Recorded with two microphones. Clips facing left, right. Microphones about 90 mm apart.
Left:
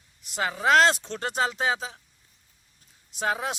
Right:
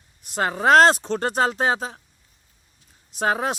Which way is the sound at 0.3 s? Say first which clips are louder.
Right 5 dB; 45° right (ahead or behind).